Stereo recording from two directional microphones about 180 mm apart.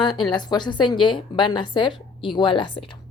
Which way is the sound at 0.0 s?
25° left (ahead or behind).